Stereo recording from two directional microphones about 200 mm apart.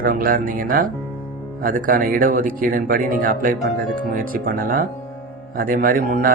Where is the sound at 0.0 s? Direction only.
45° right (ahead or behind).